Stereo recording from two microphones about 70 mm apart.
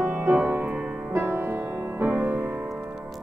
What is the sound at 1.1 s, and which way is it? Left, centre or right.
Music, right.